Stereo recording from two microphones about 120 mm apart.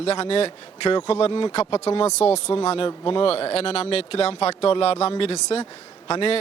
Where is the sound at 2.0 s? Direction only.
65° left (ahead or behind).